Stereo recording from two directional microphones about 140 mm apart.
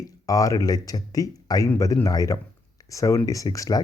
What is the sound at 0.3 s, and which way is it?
Speech, 25° left (ahead or behind).